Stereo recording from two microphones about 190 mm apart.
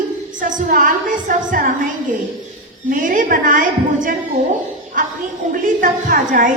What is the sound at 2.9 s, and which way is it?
A woman's voice, 45° right (ahead or behind).